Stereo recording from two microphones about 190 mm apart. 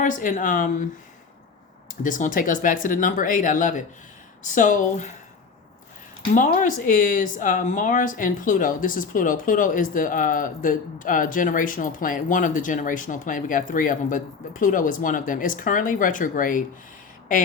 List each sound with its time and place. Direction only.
0.0 s speech: 45° left (ahead or behind)
1.9 s speech: 45° left (ahead or behind)
6.3 s speech: 40° left (ahead or behind)